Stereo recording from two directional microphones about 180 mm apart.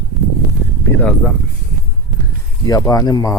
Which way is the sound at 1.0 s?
5° left (ahead or behind).